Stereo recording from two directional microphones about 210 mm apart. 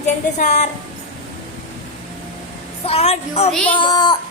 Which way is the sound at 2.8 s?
30° left (ahead or behind).